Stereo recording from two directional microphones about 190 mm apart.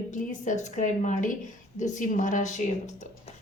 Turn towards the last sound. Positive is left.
turn(degrees=40)  # may be behind; listen again after turning